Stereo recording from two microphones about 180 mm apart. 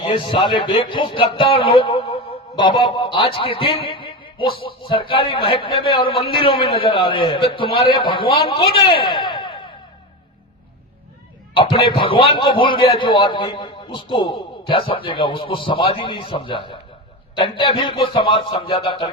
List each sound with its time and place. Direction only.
0.0 s a man's voice: 30° left (ahead or behind)
11.5 s a man's voice: 30° left (ahead or behind)